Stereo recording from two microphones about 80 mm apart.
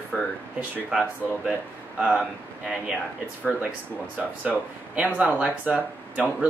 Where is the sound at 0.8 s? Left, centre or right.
Centre.